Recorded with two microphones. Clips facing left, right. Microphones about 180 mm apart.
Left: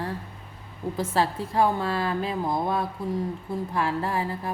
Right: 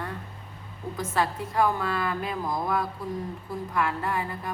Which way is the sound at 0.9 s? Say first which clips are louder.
Left 2 dB; 30° left (ahead or behind).